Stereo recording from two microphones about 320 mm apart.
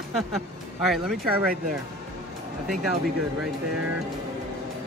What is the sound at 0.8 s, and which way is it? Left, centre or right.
Speech, centre.